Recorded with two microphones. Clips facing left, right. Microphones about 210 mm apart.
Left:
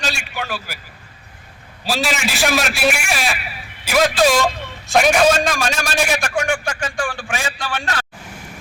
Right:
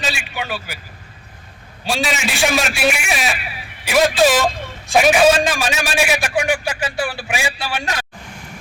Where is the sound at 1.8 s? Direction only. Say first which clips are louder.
Even; centre (ahead or behind).